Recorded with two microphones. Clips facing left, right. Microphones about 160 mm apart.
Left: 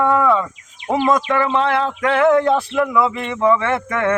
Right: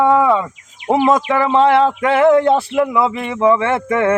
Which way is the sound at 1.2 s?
30° right (ahead or behind).